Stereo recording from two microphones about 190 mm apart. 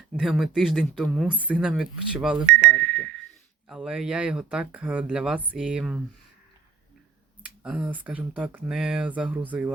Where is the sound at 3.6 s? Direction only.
5° right (ahead or behind).